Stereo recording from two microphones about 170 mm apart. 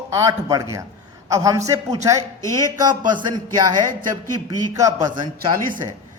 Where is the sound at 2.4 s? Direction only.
20° left (ahead or behind).